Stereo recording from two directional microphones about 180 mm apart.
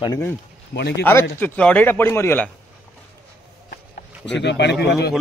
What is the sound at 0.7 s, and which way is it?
Speech, 70° left (ahead or behind).